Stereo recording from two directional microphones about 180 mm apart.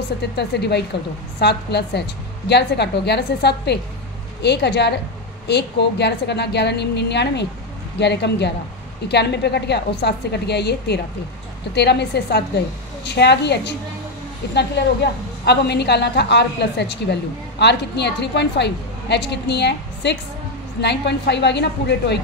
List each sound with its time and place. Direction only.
0.4 s a woman's voice: 70° left (ahead or behind)